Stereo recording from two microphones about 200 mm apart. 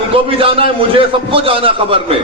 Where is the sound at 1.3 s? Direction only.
25° right (ahead or behind).